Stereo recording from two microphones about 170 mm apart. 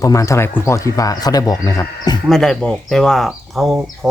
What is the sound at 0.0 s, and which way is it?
Speech, 20° left (ahead or behind).